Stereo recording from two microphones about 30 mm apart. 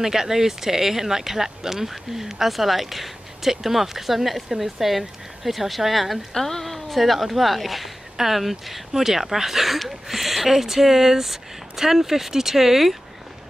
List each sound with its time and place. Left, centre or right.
0.0 s speech: centre
6.3 s speech: centre